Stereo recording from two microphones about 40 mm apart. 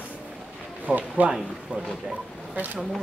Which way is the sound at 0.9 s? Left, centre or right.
Right.